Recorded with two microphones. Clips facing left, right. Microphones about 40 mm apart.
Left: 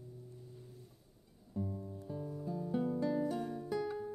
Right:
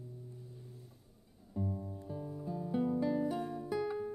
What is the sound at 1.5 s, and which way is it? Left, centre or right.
Music, centre.